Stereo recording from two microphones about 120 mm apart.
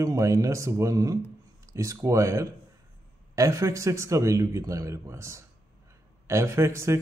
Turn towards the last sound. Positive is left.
turn(degrees=-25)  # may be behind; listen again after turning